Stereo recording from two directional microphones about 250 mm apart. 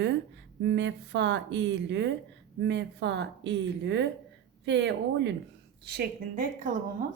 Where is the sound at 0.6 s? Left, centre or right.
Right.